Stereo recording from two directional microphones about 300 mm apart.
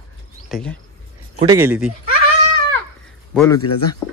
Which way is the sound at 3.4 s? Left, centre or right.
Centre.